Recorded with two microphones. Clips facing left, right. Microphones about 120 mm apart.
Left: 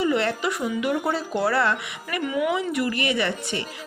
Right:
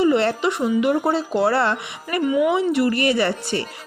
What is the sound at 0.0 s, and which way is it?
A woman's voice, 30° right (ahead or behind).